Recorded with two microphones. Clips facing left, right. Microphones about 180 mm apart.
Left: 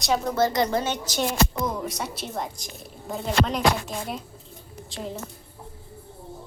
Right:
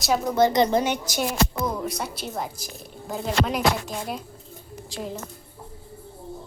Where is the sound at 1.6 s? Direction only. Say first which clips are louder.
Right 1 dB; centre (ahead or behind).